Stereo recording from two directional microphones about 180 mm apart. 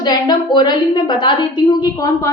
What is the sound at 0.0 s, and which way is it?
A woman's voice, 25° left (ahead or behind).